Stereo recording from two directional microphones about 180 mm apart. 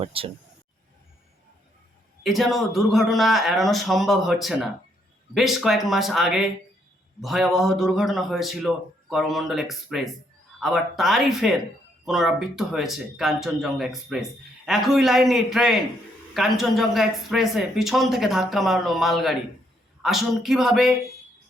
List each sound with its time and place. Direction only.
0.0 s speech: 30° right (ahead or behind)
2.2 s speech: centre (ahead or behind)